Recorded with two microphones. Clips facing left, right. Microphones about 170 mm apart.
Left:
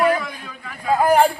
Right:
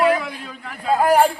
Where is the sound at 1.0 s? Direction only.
Centre (ahead or behind).